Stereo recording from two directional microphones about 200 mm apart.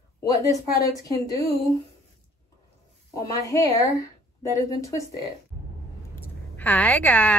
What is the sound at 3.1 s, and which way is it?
A woman's voice, 15° left (ahead or behind).